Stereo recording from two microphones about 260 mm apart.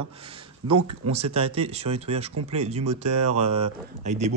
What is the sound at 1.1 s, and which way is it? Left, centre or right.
Speech, right.